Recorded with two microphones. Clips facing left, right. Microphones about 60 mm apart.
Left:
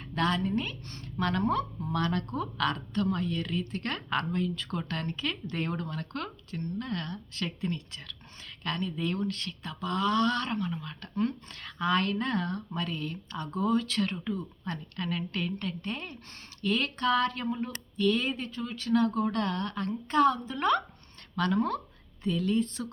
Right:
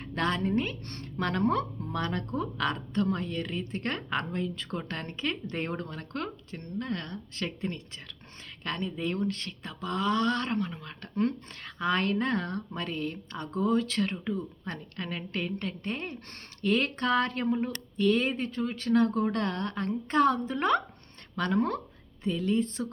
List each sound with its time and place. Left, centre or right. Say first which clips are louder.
0.0 s speech: even; right
1.9 s speech: left 5 dB; right